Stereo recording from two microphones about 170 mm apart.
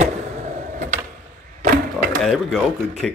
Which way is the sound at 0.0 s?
45° right (ahead or behind).